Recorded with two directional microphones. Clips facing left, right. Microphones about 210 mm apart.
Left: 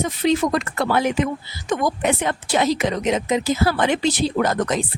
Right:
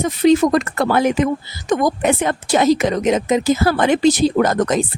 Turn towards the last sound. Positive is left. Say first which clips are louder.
# right 4 dB
turn(degrees=-45)  # may be behind; listen again after turning